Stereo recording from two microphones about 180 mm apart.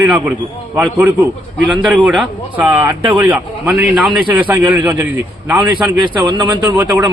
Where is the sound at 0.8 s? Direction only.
10° right (ahead or behind).